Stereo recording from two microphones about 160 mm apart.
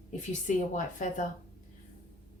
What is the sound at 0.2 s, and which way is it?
A woman's voice, 50° left (ahead or behind).